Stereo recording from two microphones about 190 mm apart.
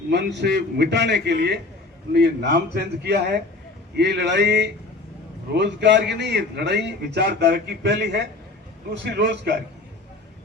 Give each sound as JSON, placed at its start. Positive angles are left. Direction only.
{"t": 0.1, "sound": "a man's voice", "side_deg": -65}